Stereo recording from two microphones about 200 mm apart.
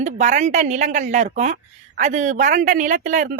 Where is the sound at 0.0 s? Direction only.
35° right (ahead or behind).